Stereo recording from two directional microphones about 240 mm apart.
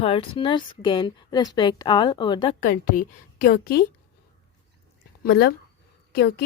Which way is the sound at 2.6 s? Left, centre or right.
Left.